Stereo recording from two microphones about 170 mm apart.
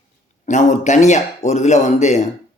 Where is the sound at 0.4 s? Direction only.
45° left (ahead or behind).